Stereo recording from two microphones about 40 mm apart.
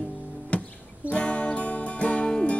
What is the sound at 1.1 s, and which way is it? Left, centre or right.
Music, left.